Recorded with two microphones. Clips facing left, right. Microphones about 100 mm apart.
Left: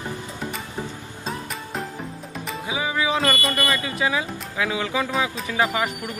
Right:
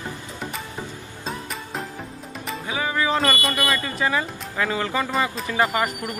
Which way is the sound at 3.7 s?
5° left (ahead or behind).